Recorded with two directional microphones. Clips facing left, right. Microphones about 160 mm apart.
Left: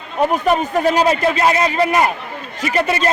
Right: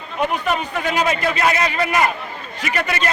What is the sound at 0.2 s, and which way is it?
A man's voice, 40° left (ahead or behind).